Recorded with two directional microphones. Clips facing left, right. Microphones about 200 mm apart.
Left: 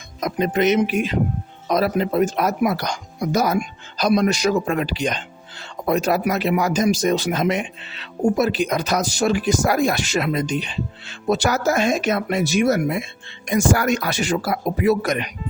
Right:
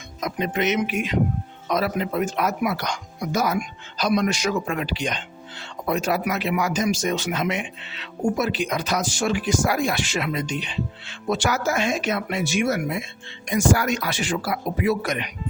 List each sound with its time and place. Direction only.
0.2 s speech: 40° left (ahead or behind)